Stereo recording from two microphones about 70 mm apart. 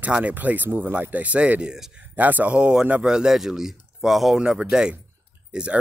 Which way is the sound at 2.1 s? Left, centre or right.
Right.